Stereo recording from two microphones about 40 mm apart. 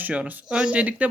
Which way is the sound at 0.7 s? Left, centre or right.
Right.